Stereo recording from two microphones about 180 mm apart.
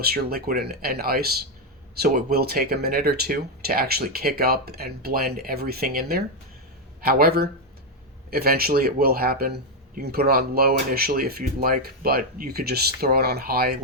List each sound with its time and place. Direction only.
0.0 s speech: 55° right (ahead or behind)